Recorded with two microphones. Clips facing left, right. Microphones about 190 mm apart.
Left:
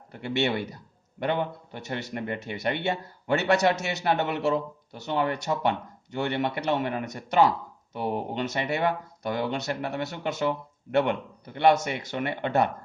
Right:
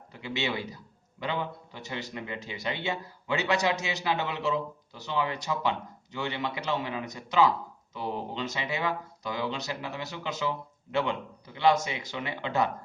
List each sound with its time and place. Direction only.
0.1 s speech: 60° left (ahead or behind)